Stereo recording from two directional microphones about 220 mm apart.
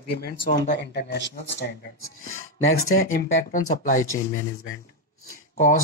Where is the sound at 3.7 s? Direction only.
35° left (ahead or behind).